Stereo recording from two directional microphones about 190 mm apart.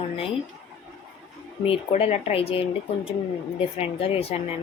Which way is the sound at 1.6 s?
35° left (ahead or behind).